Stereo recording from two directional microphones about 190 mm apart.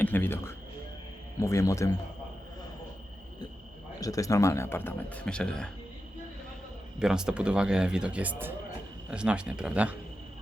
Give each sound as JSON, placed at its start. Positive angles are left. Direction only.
{"t": 0.0, "sound": "a sound", "side_deg": 10}
{"t": 1.4, "sound": "speech", "side_deg": 15}
{"t": 4.0, "sound": "speech", "side_deg": 15}
{"t": 7.0, "sound": "speech", "side_deg": -5}